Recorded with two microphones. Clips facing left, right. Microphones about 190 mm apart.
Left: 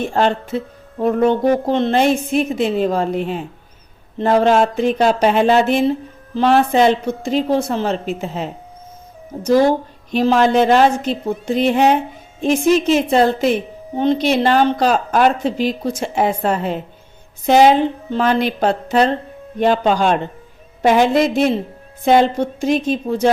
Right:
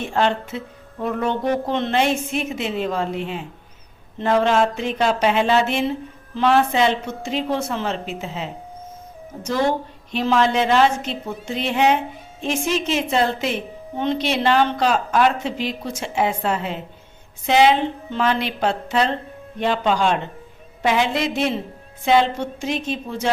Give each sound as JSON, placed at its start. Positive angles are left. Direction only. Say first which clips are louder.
{"t": 0.0, "sound": "speech", "louder": "left 3 dB", "side_deg": 35}